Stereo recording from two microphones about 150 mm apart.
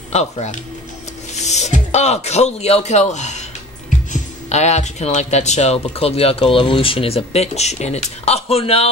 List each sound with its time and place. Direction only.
0.1 s speech: 45° left (ahead or behind)